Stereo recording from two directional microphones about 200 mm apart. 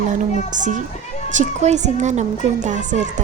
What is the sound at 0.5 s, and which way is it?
Speech, 40° right (ahead or behind).